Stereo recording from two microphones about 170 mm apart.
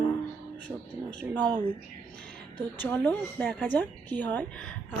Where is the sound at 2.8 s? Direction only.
10° left (ahead or behind).